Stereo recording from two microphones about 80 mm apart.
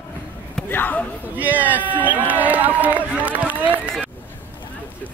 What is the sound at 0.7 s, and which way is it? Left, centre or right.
Speech, left.